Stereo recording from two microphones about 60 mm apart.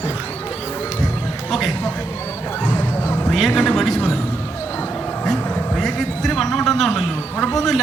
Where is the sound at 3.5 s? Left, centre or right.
Left.